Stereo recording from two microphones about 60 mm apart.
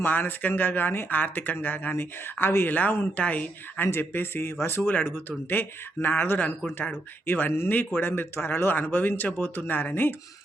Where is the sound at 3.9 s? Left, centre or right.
Left.